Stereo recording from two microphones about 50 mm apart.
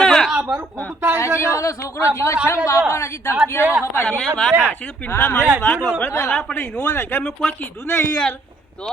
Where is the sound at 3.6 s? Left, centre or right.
Right.